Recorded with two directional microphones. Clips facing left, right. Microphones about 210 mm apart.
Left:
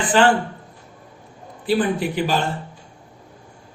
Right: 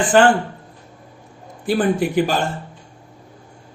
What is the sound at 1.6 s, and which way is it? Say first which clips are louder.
Speech: right 2 dB; 45° right (ahead or behind).